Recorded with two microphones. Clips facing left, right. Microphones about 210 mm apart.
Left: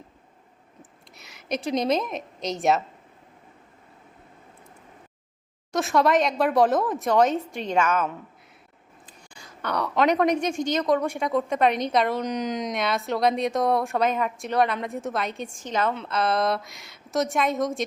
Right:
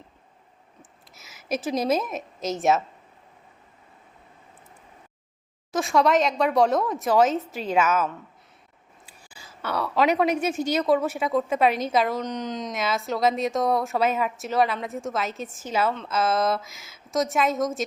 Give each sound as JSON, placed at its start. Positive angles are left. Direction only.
{"t": 0.8, "sound": "a woman's voice", "side_deg": 0}
{"t": 5.7, "sound": "a woman's voice", "side_deg": 0}
{"t": 9.0, "sound": "a woman's voice", "side_deg": -5}
{"t": 12.2, "sound": "speech", "side_deg": 10}
{"t": 12.7, "sound": "a woman's voice", "side_deg": 0}